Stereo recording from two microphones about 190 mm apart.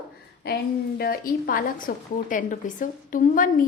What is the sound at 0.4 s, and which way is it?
A woman's voice, 55° left (ahead or behind).